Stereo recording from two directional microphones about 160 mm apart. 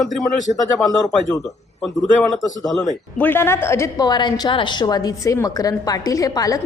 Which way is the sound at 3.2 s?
15° left (ahead or behind).